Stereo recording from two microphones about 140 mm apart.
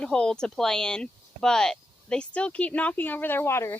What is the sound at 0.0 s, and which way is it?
Speech, 5° left (ahead or behind).